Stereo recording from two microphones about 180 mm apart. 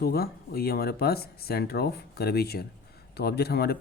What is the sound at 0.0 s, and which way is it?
Speech, 60° left (ahead or behind).